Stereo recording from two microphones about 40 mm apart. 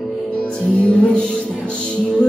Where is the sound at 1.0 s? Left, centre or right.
Left.